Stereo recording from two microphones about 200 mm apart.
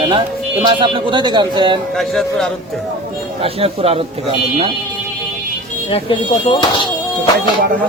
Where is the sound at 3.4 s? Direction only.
30° right (ahead or behind).